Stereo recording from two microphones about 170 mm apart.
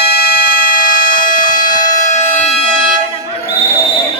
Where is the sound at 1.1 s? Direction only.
25° left (ahead or behind).